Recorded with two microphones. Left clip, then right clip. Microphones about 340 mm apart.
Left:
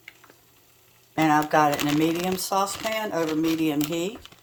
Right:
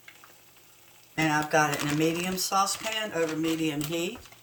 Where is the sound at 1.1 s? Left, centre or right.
Centre.